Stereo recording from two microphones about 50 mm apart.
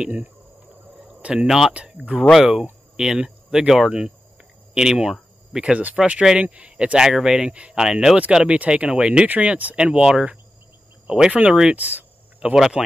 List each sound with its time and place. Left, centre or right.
1.0 s a sound: right
1.7 s speech: right
2.3 s speech: centre
3.6 s speech: centre
5.5 s speech: right
6.0 s speech: centre
7.0 s speech: centre
7.5 s speech: right
7.8 s speech: centre
9.3 s speech: right; by 11.3 s centre
11.7 s a sound: right
12.8 s speech: centre